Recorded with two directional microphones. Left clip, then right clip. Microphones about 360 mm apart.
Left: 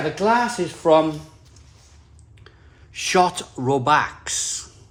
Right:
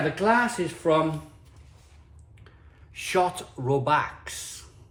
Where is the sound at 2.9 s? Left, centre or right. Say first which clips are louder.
Left 6 dB; left.